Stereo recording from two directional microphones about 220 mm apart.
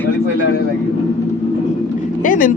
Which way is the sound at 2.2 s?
35° left (ahead or behind).